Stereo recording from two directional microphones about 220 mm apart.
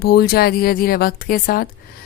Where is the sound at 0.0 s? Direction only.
45° left (ahead or behind).